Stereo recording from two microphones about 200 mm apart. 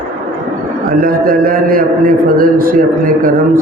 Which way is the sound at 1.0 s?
45° right (ahead or behind).